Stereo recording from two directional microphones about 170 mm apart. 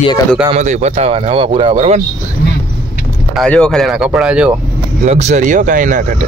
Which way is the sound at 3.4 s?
5° left (ahead or behind).